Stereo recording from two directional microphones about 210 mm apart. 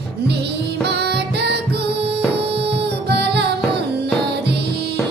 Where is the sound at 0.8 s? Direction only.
50° right (ahead or behind).